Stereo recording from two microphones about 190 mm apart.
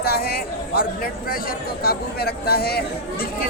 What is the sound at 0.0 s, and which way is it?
Speech, 55° left (ahead or behind).